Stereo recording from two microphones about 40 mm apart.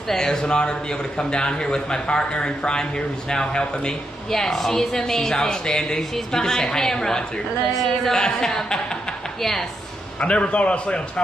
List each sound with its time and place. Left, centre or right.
0.1 s a woman's voice: centre
7.6 s speech: centre
8.1 s a woman's voice: centre
10.2 s a man's voice: left